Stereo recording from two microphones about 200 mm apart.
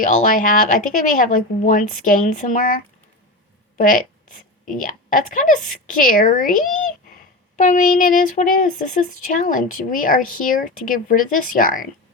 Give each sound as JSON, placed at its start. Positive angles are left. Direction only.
{"t": 0.0, "sound": "a woman's voice", "side_deg": 40}
{"t": 7.5, "sound": "speech", "side_deg": 40}